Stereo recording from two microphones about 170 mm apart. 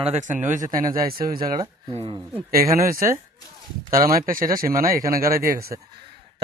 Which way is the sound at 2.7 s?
55° right (ahead or behind).